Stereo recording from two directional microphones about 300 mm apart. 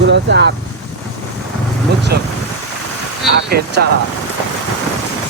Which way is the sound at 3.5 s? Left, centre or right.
Right.